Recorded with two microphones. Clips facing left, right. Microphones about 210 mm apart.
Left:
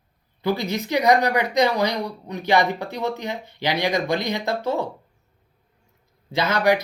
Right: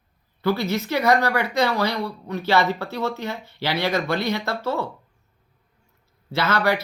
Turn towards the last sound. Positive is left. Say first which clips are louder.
# left 2 dB
turn(degrees=15)  # may be behind; listen again after turning